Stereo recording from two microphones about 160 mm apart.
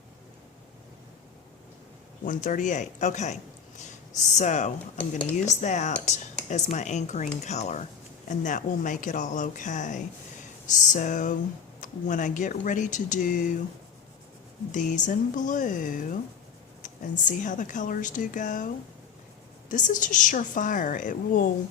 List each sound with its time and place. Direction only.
2.2 s speech: 55° left (ahead or behind)
4.4 s speech: 50° left (ahead or behind)
4.9 s speech: 10° left (ahead or behind)
5.4 s speech: 45° left (ahead or behind)
14.7 s a woman's voice: 50° left (ahead or behind)